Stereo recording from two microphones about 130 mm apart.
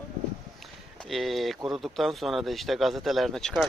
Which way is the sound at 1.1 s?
Centre (ahead or behind).